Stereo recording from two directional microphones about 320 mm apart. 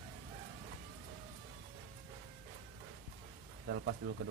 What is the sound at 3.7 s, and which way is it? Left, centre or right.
Speech, right.